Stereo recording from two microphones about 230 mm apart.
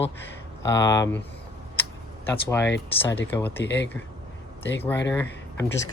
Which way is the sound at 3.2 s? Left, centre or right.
Centre.